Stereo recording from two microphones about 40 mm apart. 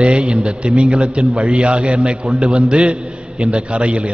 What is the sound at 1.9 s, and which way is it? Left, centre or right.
Speech, centre.